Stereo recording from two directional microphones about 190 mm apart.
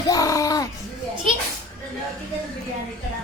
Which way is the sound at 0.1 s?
20° left (ahead or behind).